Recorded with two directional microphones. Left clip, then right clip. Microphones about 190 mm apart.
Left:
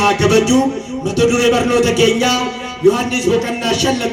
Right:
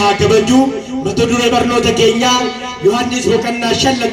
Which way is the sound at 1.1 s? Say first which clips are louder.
Even; 70° left (ahead or behind).